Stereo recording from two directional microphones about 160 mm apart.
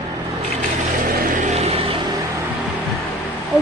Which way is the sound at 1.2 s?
55° right (ahead or behind).